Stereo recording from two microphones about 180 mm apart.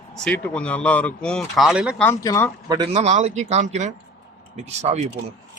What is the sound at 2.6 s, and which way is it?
Speech, 25° right (ahead or behind).